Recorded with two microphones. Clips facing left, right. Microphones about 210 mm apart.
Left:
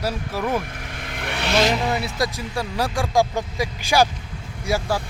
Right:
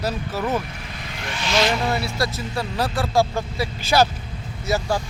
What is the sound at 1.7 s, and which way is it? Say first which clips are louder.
Speech: even; 15° left (ahead or behind).